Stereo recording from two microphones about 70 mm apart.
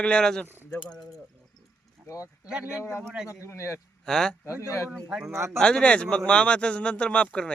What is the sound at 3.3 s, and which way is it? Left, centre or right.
Speech, left.